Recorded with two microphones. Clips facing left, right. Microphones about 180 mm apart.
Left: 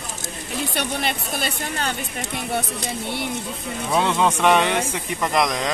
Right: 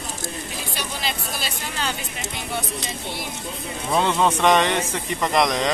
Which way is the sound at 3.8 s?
Centre (ahead or behind).